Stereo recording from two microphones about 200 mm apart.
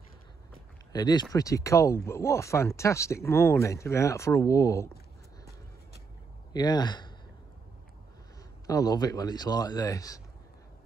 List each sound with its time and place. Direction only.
0.9 s speech: 20° left (ahead or behind)
6.5 s speech: 20° left (ahead or behind)
8.6 s speech: 20° left (ahead or behind)